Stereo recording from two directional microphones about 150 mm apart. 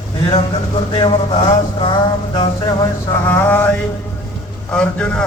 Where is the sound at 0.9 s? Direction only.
30° left (ahead or behind).